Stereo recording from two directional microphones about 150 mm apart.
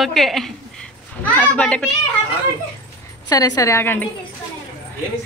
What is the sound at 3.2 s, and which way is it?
Speech, 25° left (ahead or behind).